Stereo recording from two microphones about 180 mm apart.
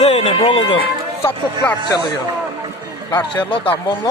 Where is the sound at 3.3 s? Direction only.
25° left (ahead or behind).